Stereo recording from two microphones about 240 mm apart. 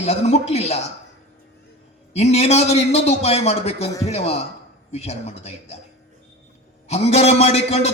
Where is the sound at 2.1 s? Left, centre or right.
Left.